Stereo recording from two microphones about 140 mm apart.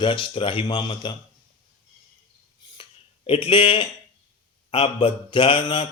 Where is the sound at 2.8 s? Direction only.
40° left (ahead or behind).